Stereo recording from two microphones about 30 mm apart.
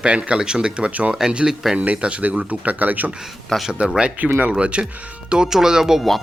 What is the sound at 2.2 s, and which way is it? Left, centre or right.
Speech, right.